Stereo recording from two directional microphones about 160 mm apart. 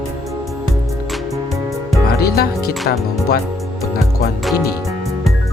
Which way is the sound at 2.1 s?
75° left (ahead or behind).